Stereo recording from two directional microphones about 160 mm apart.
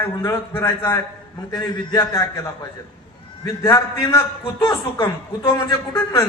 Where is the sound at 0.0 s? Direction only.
15° left (ahead or behind).